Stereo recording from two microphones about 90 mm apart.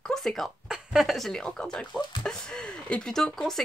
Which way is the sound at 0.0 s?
5° left (ahead or behind).